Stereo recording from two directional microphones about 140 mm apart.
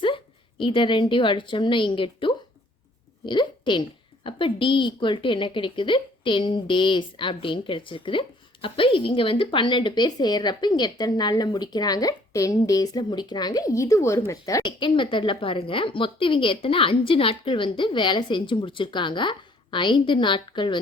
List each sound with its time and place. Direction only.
0.6 s a woman's voice: 35° left (ahead or behind)
14.8 s a woman's voice: 35° left (ahead or behind)